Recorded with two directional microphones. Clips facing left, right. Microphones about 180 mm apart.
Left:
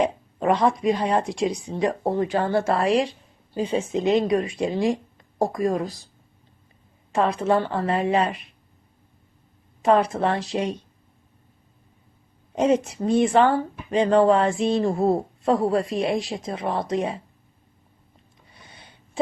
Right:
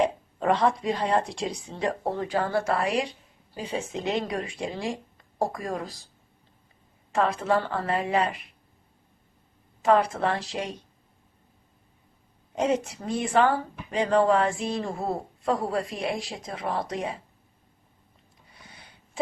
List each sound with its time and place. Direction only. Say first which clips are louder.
0.0 s speech: left 2 dB; 15° left (ahead or behind)
7.1 s speech: left 3 dB; 20° left (ahead or behind)
9.8 s speech: left 3 dB; 20° left (ahead or behind)
12.5 s speech: left 5 dB; 20° left (ahead or behind)